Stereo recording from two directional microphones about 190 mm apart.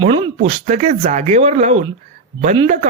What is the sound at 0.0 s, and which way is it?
Speech, 30° right (ahead or behind).